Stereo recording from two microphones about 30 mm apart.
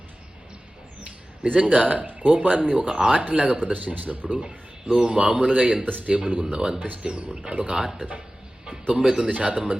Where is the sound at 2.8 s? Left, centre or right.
Right.